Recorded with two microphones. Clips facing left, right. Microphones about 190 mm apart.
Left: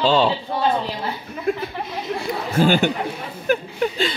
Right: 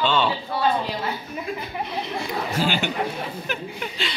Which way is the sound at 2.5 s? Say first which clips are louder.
Left 9 dB; 50° left (ahead or behind).